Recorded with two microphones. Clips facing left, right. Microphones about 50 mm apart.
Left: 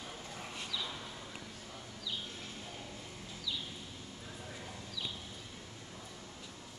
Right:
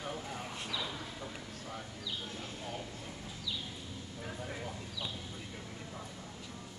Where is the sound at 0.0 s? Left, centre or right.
Right.